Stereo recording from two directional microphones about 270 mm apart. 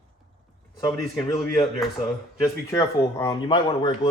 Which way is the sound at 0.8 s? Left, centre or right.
Centre.